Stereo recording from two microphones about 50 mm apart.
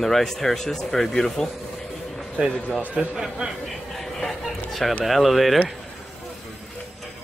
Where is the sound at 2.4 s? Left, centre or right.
Right.